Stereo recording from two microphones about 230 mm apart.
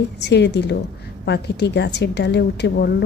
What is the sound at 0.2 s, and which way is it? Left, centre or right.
A woman's voice, left.